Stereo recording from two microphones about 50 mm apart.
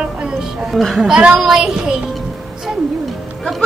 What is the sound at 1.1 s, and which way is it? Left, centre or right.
Speech, centre.